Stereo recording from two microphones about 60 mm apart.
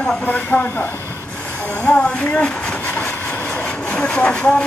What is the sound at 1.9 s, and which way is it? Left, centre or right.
Speech, centre.